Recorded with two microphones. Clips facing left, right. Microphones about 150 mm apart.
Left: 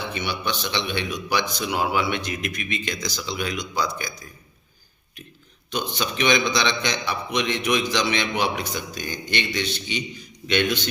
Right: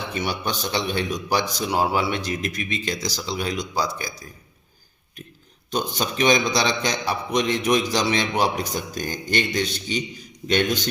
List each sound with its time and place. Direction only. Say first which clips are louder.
0.1 s a man's voice: right 1 dB; 40° right (ahead or behind)
5.7 s a man's voice: right 2 dB; 40° right (ahead or behind)